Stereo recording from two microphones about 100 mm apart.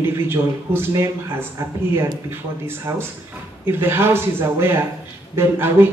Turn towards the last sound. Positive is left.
turn(degrees=-25)  # may be behind; listen again after turning